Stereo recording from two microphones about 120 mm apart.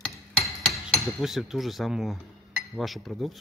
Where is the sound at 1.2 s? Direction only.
Centre (ahead or behind).